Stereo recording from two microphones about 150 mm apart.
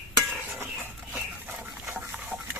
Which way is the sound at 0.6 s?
10° right (ahead or behind).